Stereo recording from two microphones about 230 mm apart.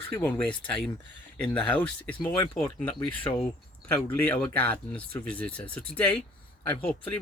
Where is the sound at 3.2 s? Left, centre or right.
Left.